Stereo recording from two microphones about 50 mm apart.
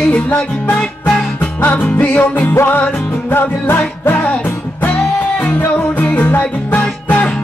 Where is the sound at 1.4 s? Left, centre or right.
Left.